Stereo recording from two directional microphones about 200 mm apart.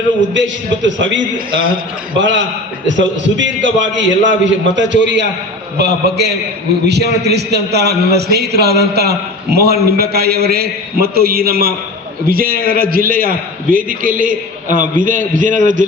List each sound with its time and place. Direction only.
0.3 s a man's voice: 65° right (ahead or behind)
2.1 s a man's voice: 65° right (ahead or behind); by 15.9 s 40° right (ahead or behind)